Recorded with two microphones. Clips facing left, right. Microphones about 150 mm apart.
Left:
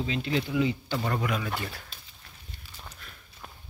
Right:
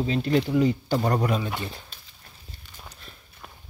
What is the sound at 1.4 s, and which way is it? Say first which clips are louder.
Speech: right 2 dB; 20° right (ahead or behind).